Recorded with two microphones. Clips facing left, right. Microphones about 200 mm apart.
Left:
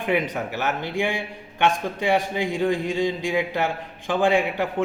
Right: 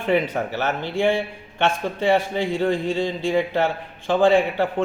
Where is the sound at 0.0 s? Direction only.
15° left (ahead or behind).